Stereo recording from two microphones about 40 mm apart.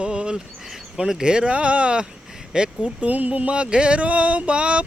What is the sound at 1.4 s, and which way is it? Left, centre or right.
Speech, right.